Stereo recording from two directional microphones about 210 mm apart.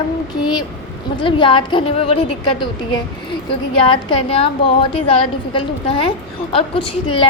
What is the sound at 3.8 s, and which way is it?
A woman's voice, 25° left (ahead or behind).